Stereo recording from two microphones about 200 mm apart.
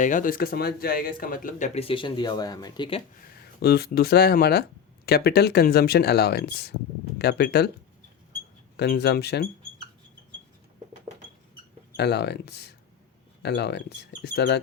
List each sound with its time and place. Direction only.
0.0 s speech: 40° left (ahead or behind); by 3.0 s 25° left (ahead or behind)
3.6 s speech: 50° left (ahead or behind)
8.7 s speech: 55° left (ahead or behind)
11.9 s speech: 55° left (ahead or behind)